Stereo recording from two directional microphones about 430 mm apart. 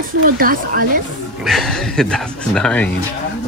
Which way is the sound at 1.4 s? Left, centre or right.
Centre.